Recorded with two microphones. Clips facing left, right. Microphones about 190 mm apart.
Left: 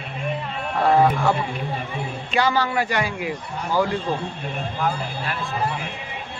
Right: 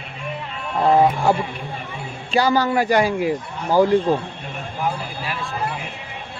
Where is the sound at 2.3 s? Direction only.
40° right (ahead or behind).